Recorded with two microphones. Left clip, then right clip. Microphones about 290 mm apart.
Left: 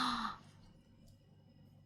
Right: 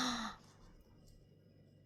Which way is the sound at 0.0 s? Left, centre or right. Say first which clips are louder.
Left 3 dB; left.